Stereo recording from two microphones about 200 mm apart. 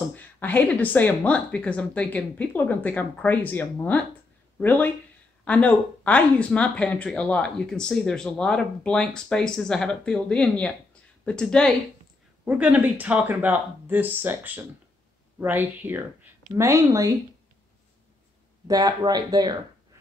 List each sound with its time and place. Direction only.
0.1 s speech: 10° left (ahead or behind)
12.4 s speech: 5° right (ahead or behind)
18.7 s speech: 20° right (ahead or behind)